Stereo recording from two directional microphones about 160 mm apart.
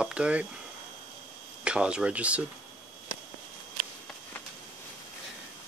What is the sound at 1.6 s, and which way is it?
Speech, 5° right (ahead or behind).